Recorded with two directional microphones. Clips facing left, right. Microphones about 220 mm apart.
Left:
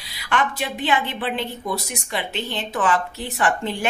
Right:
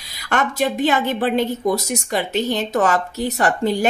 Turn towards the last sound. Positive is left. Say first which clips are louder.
# right 4 dB
turn(degrees=-40)  # may be behind; listen again after turning